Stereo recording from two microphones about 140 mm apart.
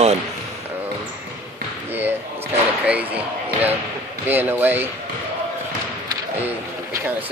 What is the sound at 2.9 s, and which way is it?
Basketball bounce, 10° right (ahead or behind).